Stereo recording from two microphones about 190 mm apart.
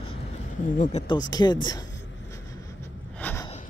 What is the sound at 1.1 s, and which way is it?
Speech, 20° left (ahead or behind).